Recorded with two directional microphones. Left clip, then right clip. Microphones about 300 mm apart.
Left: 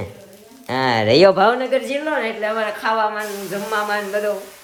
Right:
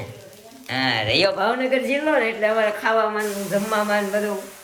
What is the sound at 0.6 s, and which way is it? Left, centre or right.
Speech, centre.